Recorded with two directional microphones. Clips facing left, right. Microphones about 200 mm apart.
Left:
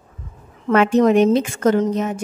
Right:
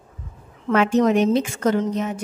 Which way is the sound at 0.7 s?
60° left (ahead or behind).